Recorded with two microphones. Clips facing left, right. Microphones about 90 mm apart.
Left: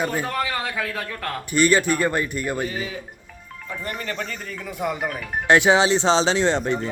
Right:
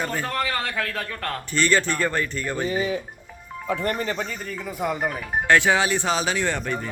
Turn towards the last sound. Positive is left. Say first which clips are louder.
# left 5 dB
turn(degrees=20)  # may be behind; listen again after turning